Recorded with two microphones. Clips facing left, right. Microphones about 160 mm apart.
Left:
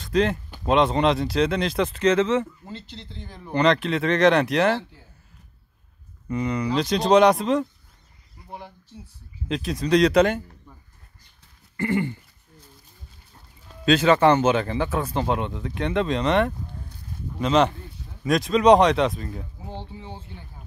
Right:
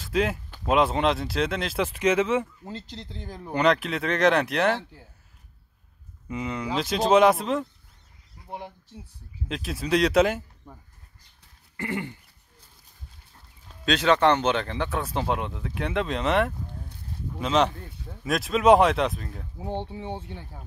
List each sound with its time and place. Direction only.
0.0 s speech: 5° right (ahead or behind)
2.7 s speech: 40° right (ahead or behind)
3.5 s speech: 5° right (ahead or behind)
6.2 s speech: 5° right (ahead or behind)
8.5 s speech: 20° right (ahead or behind)
9.5 s speech: 5° right (ahead or behind)
11.7 s a sound: centre (ahead or behind)
13.8 s speech: centre (ahead or behind)
19.6 s speech: 60° right (ahead or behind)